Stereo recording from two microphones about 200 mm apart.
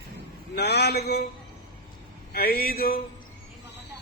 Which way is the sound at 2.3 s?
50° left (ahead or behind).